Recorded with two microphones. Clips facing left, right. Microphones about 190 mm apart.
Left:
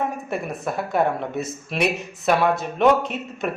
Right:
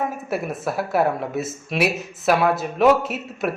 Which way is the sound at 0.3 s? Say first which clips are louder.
Right 2 dB; 5° right (ahead or behind).